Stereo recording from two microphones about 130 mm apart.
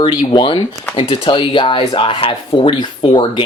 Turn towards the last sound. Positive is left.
turn(degrees=40)  # may be behind; listen again after turning